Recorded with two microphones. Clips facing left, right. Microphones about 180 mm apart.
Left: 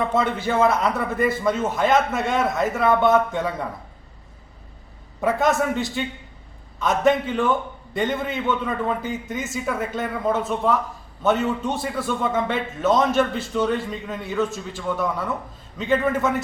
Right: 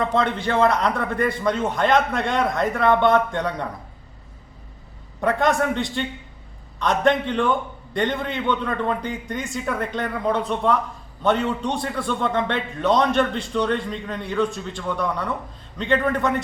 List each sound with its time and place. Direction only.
0.0 s a man's voice: 5° left (ahead or behind)
5.2 s a man's voice: 5° left (ahead or behind)